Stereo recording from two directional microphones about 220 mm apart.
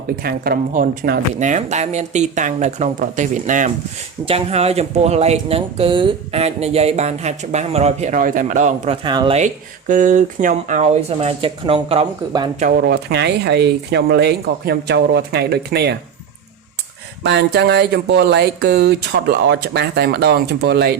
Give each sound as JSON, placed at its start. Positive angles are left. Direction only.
{"t": 0.2, "sound": "speech", "side_deg": -45}
{"t": 12.5, "sound": "speech", "side_deg": -40}
{"t": 17.2, "sound": "speech", "side_deg": -50}